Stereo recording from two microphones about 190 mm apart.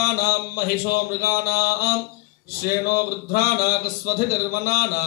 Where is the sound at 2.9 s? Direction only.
55° left (ahead or behind).